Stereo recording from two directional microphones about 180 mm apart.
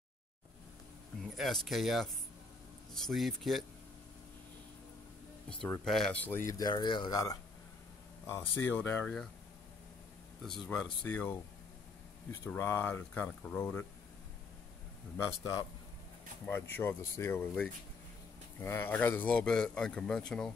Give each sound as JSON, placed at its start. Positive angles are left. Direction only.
{"t": 1.2, "sound": "a man's voice", "side_deg": 0}
{"t": 5.5, "sound": "speech", "side_deg": 5}
{"t": 6.6, "sound": "speech", "side_deg": 25}
{"t": 10.4, "sound": "speech", "side_deg": 5}
{"t": 12.4, "sound": "speech", "side_deg": 15}
{"t": 16.4, "sound": "a man's voice", "side_deg": 10}